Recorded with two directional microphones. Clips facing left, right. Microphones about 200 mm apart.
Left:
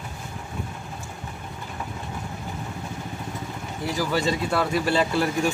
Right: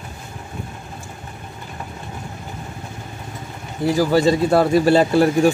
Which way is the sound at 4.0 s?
35° right (ahead or behind).